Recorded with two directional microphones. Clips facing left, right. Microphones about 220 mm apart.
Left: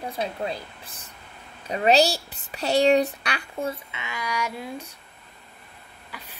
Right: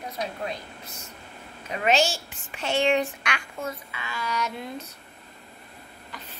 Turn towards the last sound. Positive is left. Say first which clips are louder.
# even
turn(degrees=10)  # may be behind; listen again after turning